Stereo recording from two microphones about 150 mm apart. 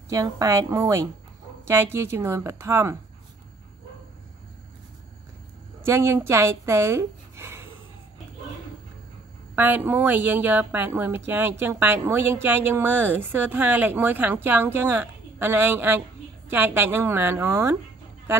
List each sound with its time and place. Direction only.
0.1 s a woman's voice: 25° right (ahead or behind)
5.9 s speech: 15° right (ahead or behind)
9.6 s a woman's voice: 15° right (ahead or behind)